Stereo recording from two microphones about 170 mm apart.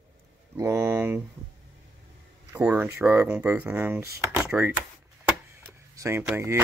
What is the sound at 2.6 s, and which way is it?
Speech, 15° right (ahead or behind).